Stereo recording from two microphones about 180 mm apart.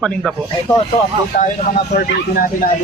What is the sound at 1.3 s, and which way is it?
Speech, 45° left (ahead or behind).